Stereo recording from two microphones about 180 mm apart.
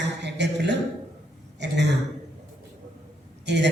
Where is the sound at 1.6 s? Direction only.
75° right (ahead or behind).